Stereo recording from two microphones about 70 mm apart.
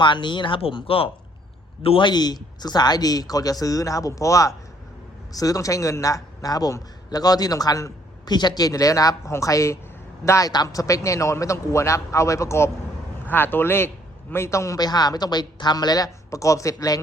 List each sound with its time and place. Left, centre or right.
0.0 s speech: left
2.0 s a man's voice: left
8.3 s a man's voice: left
10.5 s a man's voice: left
13.2 s a man's voice: left
14.8 s speech: left
16.3 s a man's voice: left